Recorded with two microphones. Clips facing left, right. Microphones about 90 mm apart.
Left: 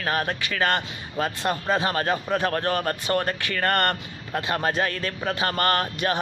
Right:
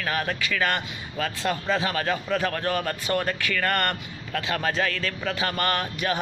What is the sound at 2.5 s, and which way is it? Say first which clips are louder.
Speech: left 2 dB; 35° left (ahead or behind).